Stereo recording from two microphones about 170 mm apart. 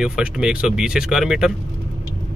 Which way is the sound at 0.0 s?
5° right (ahead or behind).